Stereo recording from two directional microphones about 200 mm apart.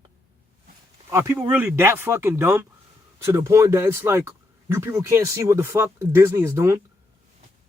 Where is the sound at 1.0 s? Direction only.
10° right (ahead or behind).